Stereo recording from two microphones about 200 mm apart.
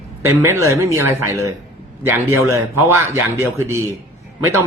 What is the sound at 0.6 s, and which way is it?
Speech, 15° right (ahead or behind).